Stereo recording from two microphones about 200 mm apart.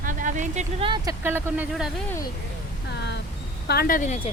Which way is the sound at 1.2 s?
10° right (ahead or behind).